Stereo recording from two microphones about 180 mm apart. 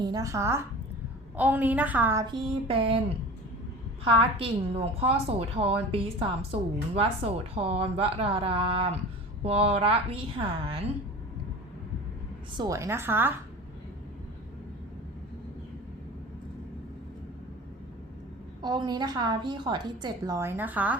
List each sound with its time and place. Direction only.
0.0 s a woman's voice: 20° right (ahead or behind)
2.3 s a woman's voice: 30° right (ahead or behind)
4.0 s a woman's voice: 30° right (ahead or behind)
12.5 s a woman's voice: 20° right (ahead or behind)
18.6 s a woman's voice: 25° right (ahead or behind); by 21.0 s 10° right (ahead or behind)